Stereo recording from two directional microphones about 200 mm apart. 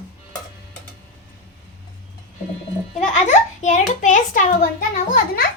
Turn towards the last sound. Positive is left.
turn(degrees=45)  # may be behind; listen again after turning